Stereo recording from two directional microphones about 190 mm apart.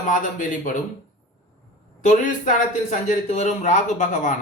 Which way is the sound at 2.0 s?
40° left (ahead or behind).